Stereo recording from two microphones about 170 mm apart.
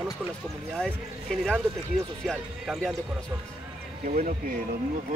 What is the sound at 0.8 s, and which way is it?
Speech, 5° left (ahead or behind).